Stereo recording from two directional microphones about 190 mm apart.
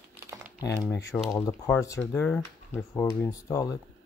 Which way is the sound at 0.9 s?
15° left (ahead or behind).